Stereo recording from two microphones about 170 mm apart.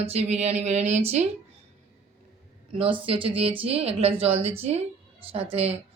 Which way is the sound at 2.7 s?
30° right (ahead or behind).